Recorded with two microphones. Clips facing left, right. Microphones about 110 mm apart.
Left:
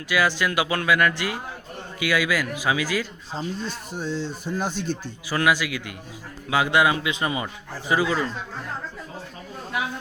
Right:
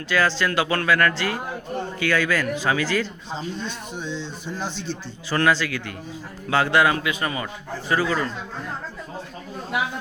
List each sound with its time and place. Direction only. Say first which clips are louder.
0.1 s speech: right 1 dB; 10° left (ahead or behind)
4.0 s speech: left 4 dB; 45° left (ahead or behind)
4.4 s speech: left 3 dB; 10° left (ahead or behind)